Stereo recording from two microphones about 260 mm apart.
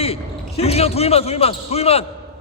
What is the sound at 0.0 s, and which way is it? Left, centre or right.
A man's voice, left.